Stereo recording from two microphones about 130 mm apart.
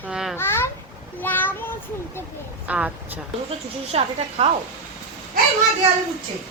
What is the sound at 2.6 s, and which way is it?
Speech, 10° right (ahead or behind).